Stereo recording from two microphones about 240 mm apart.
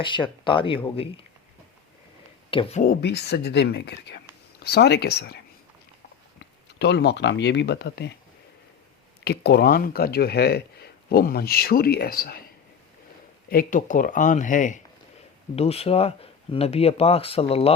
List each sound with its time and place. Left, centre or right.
0.0 s speech: centre
2.5 s speech: left
2.8 s speech: left
6.7 s speech: left
9.2 s speech: left
13.5 s speech: left